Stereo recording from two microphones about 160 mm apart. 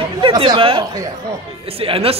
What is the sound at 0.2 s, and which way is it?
Speech, 30° right (ahead or behind).